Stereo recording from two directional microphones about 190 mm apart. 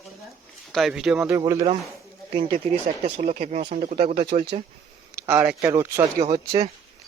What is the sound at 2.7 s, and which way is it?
Speech, 35° right (ahead or behind).